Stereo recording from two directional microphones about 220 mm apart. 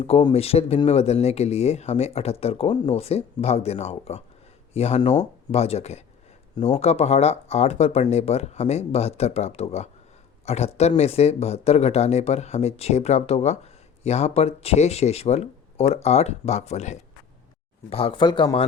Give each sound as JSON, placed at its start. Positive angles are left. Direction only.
{"t": 0.0, "sound": "speech", "side_deg": 25}